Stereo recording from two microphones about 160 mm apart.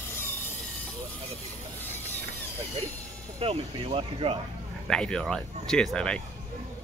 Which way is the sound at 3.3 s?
40° right (ahead or behind).